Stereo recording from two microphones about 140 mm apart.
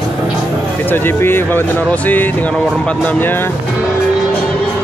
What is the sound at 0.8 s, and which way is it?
Speech, 15° left (ahead or behind).